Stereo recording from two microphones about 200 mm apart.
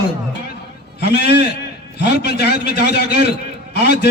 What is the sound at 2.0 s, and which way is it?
A man's voice, 55° left (ahead or behind).